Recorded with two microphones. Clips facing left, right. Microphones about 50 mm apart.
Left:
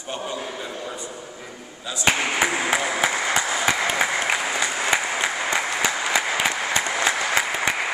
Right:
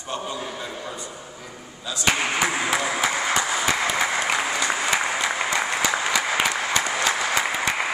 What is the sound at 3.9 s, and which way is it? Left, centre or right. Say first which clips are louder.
Applause: even; centre.